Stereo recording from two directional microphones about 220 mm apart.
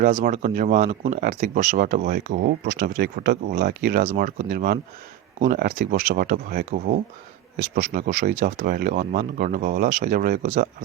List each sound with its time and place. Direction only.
0.0 s speech: 35° right (ahead or behind)